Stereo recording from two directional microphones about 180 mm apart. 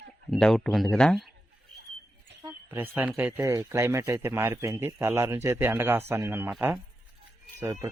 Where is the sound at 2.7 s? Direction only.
10° right (ahead or behind).